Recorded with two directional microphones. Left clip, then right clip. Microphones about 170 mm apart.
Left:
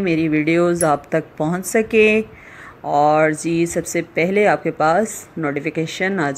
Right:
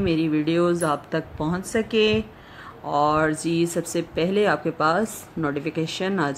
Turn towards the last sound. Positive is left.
turn(degrees=10)  # may be behind; listen again after turning